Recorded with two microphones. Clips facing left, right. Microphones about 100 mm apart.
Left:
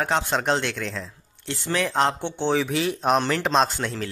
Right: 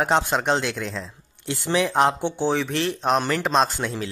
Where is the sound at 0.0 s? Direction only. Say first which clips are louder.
Right 3 dB; 15° right (ahead or behind).